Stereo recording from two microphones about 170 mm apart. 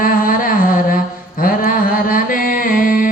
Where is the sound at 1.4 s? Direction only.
55° left (ahead or behind).